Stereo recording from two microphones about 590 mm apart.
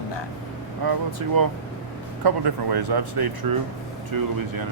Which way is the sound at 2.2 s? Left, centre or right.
Right.